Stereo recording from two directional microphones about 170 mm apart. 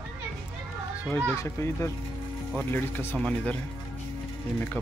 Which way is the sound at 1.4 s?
15° left (ahead or behind).